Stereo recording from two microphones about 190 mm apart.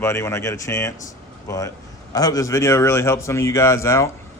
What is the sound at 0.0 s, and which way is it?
Speech, 15° left (ahead or behind).